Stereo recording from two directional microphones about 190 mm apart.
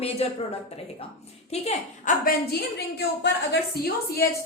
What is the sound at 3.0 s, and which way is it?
Speech, 60° left (ahead or behind).